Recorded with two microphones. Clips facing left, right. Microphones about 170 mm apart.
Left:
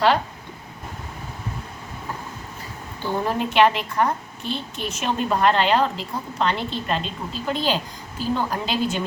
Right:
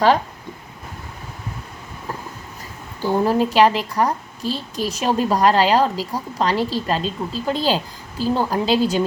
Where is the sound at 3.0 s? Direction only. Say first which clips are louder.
Right 6 dB; 35° right (ahead or behind).